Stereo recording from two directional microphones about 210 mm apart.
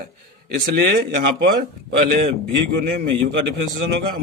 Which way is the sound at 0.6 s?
45° right (ahead or behind).